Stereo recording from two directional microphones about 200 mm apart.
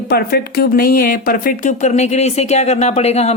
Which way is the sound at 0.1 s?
50° left (ahead or behind).